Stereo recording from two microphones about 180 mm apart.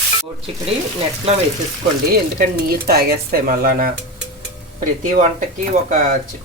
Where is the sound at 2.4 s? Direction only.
55° right (ahead or behind).